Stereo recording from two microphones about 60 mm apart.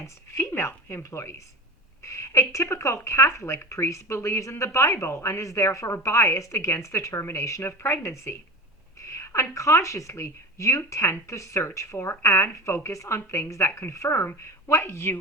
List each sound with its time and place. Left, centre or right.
0.0 s a woman's voice: left
7.7 s a woman's voice: left
13.1 s speech: left